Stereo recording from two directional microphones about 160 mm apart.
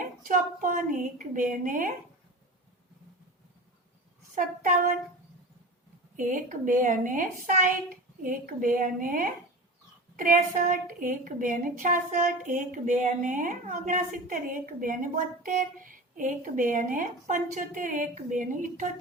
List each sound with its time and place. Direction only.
0.0 s a woman's voice: 55° right (ahead or behind)
4.4 s a woman's voice: 55° right (ahead or behind)
6.1 s a woman's voice: 55° right (ahead or behind)